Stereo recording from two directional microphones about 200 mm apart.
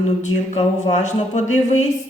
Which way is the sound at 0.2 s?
35° left (ahead or behind).